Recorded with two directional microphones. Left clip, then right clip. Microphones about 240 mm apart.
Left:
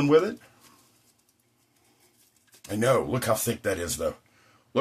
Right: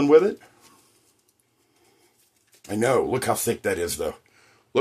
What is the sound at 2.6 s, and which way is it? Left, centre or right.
Speech, right.